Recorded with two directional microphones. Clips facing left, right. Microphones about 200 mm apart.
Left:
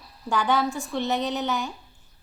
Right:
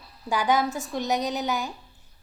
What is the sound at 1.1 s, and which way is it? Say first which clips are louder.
Speech: right 1 dB; 40° right (ahead or behind).